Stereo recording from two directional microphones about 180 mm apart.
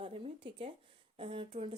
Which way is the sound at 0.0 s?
30° right (ahead or behind).